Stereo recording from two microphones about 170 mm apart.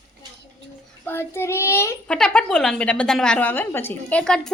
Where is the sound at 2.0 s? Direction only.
5° left (ahead or behind).